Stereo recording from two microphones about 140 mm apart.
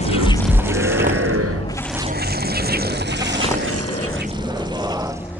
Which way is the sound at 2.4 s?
90° right.